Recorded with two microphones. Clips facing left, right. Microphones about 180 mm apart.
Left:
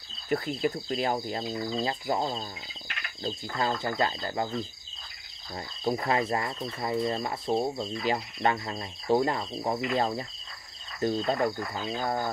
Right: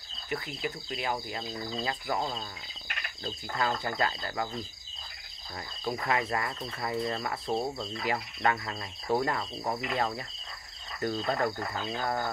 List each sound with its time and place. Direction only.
0.3 s speech: 40° left (ahead or behind)
1.7 s cricket: 20° left (ahead or behind)
5.9 s cricket: 30° left (ahead or behind)